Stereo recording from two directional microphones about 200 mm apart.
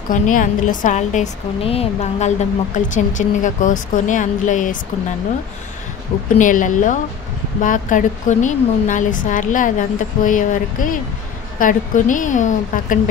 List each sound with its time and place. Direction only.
0.1 s a woman's voice: 40° left (ahead or behind)
6.3 s a woman's voice: 40° left (ahead or behind)